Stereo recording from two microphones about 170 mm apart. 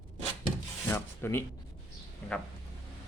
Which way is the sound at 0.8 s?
15° left (ahead or behind).